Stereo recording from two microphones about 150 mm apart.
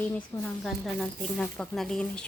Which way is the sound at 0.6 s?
5° left (ahead or behind).